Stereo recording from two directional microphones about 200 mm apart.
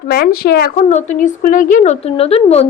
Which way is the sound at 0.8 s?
35° left (ahead or behind).